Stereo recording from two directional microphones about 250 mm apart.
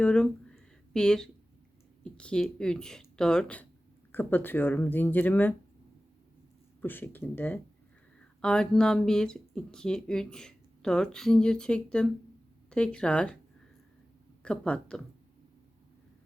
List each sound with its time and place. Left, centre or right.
0.0 s a sound: centre
2.1 s speech: centre
6.8 s speech: centre
14.4 s speech: centre